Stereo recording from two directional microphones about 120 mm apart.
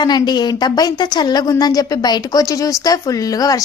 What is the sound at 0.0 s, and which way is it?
Speech, 35° left (ahead or behind).